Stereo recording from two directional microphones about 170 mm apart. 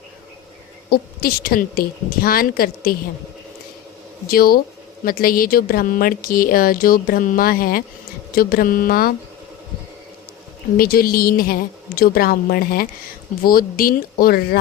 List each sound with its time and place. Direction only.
0.9 s speech: 65° left (ahead or behind)
4.3 s speech: 60° left (ahead or behind)
10.8 s speech: 60° left (ahead or behind)